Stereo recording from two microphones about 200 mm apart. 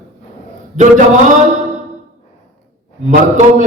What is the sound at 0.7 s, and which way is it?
Speech, 35° right (ahead or behind).